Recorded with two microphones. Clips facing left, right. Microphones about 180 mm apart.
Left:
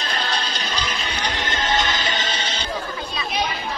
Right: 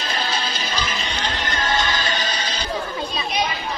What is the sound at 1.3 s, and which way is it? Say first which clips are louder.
Music: left 1 dB; 20° left (ahead or behind).